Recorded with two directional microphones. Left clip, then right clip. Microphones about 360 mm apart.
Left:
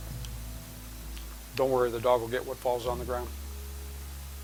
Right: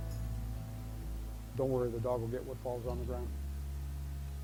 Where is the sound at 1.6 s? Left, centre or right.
Centre.